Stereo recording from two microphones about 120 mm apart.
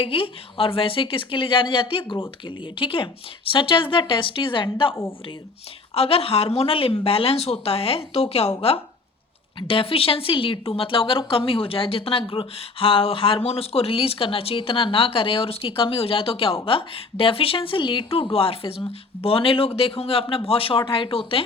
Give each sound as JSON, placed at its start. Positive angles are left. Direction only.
{"t": 0.0, "sound": "speech", "side_deg": 50}